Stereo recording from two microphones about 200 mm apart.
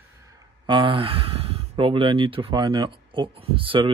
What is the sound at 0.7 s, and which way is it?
Speech, 25° right (ahead or behind).